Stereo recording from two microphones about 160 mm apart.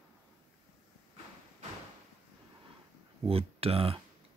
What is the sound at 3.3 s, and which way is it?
Speech, 35° right (ahead or behind).